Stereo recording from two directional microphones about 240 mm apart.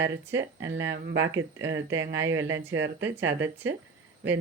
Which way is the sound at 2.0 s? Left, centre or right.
Right.